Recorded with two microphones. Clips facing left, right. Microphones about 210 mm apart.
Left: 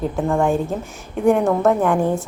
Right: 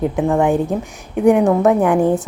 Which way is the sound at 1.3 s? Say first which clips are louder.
Right 4 dB; 5° right (ahead or behind).